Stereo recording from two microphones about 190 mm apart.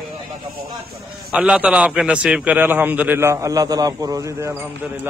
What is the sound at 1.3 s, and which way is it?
A man's voice, 5° right (ahead or behind).